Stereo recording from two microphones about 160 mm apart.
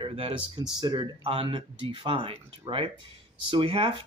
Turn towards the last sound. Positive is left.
turn(degrees=-35)  # may be behind; listen again after turning